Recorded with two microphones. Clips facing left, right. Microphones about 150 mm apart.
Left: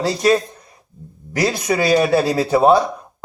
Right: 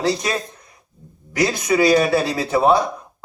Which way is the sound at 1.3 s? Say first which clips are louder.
Right 1 dB; 35° left (ahead or behind).